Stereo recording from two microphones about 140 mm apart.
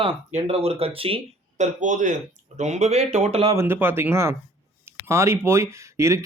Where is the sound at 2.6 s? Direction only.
55° right (ahead or behind).